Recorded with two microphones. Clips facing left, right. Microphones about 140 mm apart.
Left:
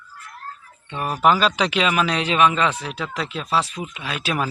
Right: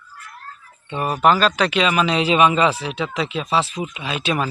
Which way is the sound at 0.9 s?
10° right (ahead or behind).